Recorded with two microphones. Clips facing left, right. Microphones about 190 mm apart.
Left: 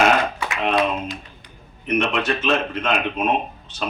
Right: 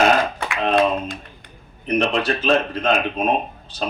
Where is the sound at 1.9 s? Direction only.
35° right (ahead or behind).